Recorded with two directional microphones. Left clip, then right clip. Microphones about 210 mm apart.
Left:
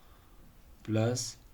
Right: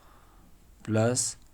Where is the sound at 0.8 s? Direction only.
50° right (ahead or behind).